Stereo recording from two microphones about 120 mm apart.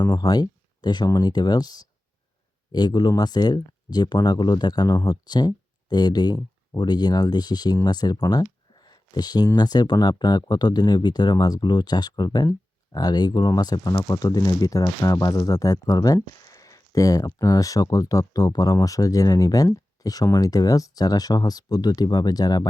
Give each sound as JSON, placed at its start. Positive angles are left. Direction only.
{"t": 0.0, "sound": "speech", "side_deg": 30}